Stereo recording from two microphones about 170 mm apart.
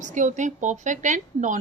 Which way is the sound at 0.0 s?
45° right (ahead or behind).